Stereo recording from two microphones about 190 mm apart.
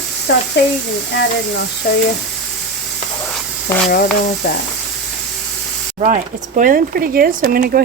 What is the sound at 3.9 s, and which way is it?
Speech, 50° left (ahead or behind).